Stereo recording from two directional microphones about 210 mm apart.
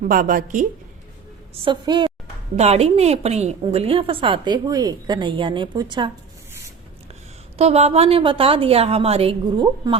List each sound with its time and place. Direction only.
0.0 s a woman's voice: 40° right (ahead or behind)
1.6 s a woman's voice: 20° right (ahead or behind)
7.6 s a woman's voice: 30° right (ahead or behind)